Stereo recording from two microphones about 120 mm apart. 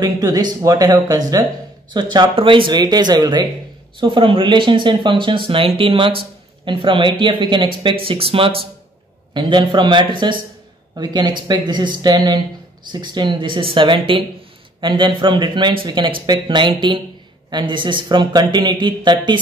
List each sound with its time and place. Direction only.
0.0 s speech: 30° right (ahead or behind); by 8.6 s 50° right (ahead or behind)
9.3 s speech: 40° right (ahead or behind)